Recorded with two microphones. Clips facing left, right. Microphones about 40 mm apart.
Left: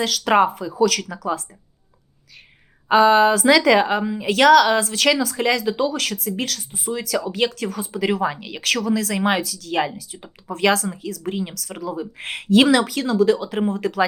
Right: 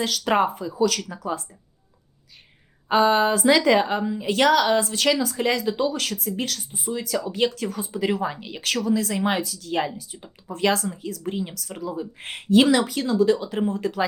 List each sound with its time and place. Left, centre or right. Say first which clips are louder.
0.0 s speech: left 4 dB; left
2.9 s speech: left 5 dB; left
5.6 s speech: left 2 dB; left
8.2 s speech: left 4 dB; left
8.6 s speech: left 2 dB; left
9.7 s speech: left 3 dB; left
10.5 s speech: left 3 dB; left
11.2 s speech: left 2 dB; left
12.1 s speech: left 2 dB; left